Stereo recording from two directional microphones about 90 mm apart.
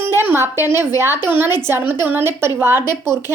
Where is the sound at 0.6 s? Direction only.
25° right (ahead or behind).